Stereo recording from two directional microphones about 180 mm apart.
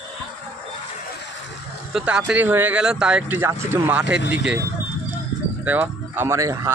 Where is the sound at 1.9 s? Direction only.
5° right (ahead or behind).